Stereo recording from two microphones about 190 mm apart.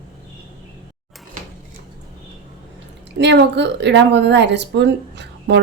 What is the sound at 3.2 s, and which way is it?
A woman's voice, 65° right (ahead or behind).